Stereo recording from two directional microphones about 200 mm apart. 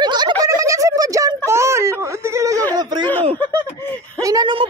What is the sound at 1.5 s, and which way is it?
Whimper, 15° right (ahead or behind).